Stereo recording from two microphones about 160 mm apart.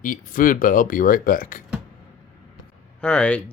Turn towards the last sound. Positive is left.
turn(degrees=5)  # may be behind; listen again after turning